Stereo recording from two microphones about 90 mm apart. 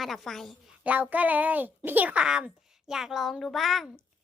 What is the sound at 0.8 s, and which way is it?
A child's voice, 20° right (ahead or behind).